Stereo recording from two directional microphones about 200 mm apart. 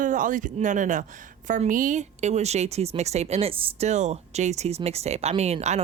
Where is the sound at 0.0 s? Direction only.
40° right (ahead or behind).